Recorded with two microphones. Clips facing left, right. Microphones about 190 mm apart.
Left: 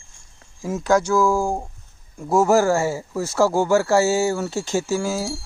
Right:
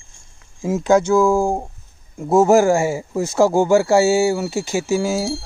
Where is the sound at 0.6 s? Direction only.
25° right (ahead or behind).